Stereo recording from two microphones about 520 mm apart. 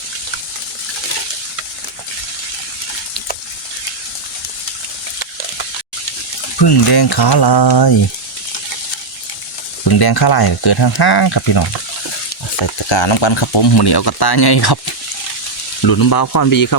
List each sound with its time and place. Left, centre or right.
6.6 s speech: left
9.9 s speech: left
12.6 s speech: left
15.9 s speech: left